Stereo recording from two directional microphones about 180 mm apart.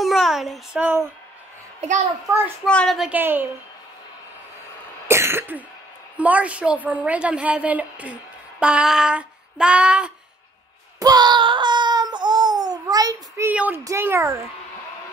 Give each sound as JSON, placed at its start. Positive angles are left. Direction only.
{"t": 0.0, "sound": "a sound", "side_deg": 0}
{"t": 2.2, "sound": "a woman's voice", "side_deg": -15}
{"t": 2.6, "sound": "a woman's voice", "side_deg": 5}
{"t": 5.0, "sound": "cough", "side_deg": -15}
{"t": 6.1, "sound": "a woman's voice", "side_deg": -10}
{"t": 11.0, "sound": "a sound", "side_deg": -20}